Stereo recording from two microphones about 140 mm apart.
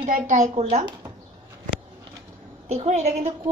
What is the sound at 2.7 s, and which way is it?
Speech, 55° right (ahead or behind).